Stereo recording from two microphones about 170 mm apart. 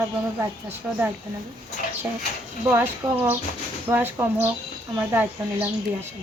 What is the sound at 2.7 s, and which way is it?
A woman's voice, 15° right (ahead or behind).